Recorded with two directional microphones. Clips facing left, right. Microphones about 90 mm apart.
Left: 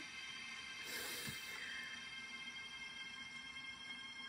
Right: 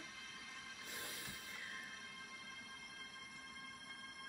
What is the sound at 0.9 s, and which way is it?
Music, 20° left (ahead or behind).